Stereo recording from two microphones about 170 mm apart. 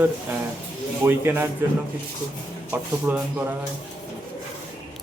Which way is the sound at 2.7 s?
10° right (ahead or behind).